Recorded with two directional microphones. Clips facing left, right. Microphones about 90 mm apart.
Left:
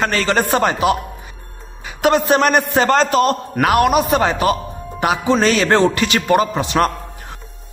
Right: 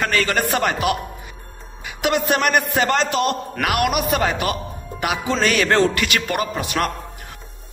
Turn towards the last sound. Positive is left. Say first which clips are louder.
# left 6 dB
turn(degrees=30)  # may be behind; listen again after turning